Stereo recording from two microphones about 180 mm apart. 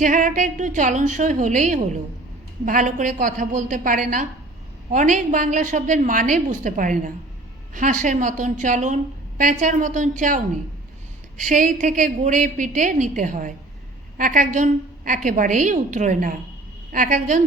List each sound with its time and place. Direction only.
0.0 s a woman's voice: 45° right (ahead or behind)